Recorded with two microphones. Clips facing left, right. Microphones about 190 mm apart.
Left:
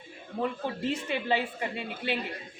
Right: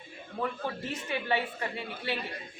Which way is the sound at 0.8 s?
25° left (ahead or behind).